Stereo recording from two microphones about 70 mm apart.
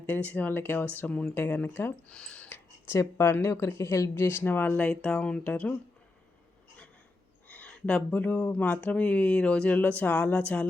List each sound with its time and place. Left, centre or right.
0.0 s speech: left
0.9 s speech: centre
1.3 s speech: left
2.0 s speech: centre
2.5 s speech: left
7.4 s a sound: left
7.7 s speech: centre